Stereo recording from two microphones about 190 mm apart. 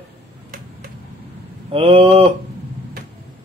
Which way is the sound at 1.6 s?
30° right (ahead or behind).